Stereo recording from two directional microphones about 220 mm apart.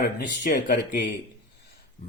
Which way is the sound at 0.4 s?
35° left (ahead or behind).